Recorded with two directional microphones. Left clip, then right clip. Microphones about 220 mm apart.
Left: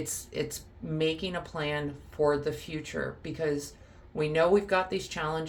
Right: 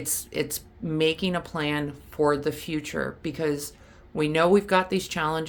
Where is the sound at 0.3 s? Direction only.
50° right (ahead or behind).